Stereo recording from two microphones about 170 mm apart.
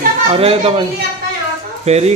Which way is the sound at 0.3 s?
35° right (ahead or behind).